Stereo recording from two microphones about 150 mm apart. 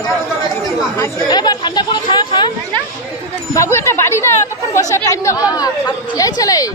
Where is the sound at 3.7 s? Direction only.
20° left (ahead or behind).